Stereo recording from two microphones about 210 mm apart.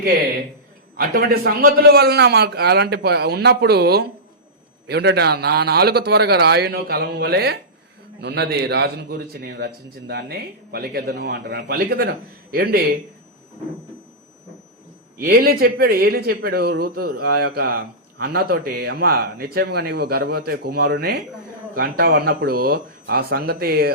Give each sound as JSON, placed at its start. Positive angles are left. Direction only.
{"t": 0.9, "sound": "a man's voice", "side_deg": -45}
{"t": 15.2, "sound": "a man's voice", "side_deg": -45}